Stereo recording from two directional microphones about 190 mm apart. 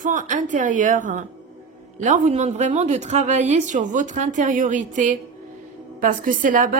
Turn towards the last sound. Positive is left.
turn(degrees=-45)  # may be behind; listen again after turning